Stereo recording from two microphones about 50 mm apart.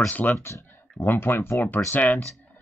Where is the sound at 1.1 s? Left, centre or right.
Left.